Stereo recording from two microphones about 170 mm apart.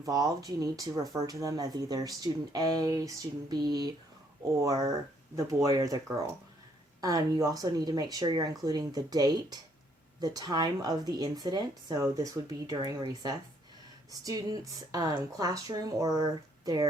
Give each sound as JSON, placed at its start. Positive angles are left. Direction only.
{"t": 0.0, "sound": "speech", "side_deg": -20}